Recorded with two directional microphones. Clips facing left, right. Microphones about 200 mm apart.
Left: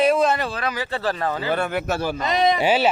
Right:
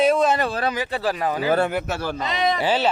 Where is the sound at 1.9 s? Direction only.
45° left (ahead or behind).